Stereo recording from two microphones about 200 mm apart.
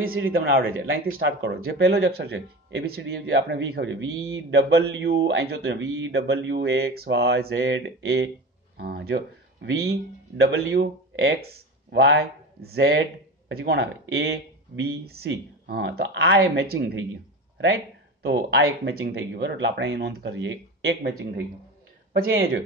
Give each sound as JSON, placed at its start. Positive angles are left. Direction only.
{"t": 0.3, "sound": "speech", "side_deg": -50}
{"t": 0.7, "sound": "speech", "side_deg": -80}
{"t": 1.0, "sound": "speech", "side_deg": -55}
{"t": 4.1, "sound": "speech", "side_deg": -15}
{"t": 4.5, "sound": "speech", "side_deg": -55}
{"t": 8.7, "sound": "speech", "side_deg": -50}
{"t": 18.2, "sound": "speech", "side_deg": -60}